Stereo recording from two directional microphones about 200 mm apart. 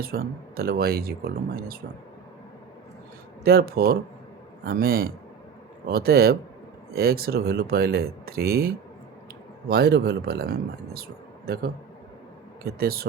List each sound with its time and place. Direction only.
0.0 s speech: 50° right (ahead or behind)
3.4 s speech: 50° right (ahead or behind)